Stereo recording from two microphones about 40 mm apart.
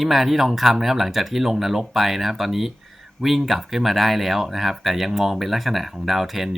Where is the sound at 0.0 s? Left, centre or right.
Centre.